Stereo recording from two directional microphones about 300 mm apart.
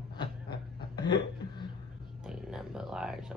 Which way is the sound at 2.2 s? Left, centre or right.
Centre.